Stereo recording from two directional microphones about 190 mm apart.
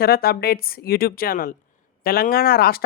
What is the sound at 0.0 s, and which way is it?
Speech, 55° left (ahead or behind).